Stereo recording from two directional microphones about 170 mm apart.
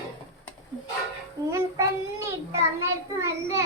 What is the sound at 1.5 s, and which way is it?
Child singing, 20° right (ahead or behind).